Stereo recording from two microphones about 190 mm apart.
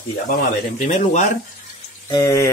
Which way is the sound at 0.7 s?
40° left (ahead or behind).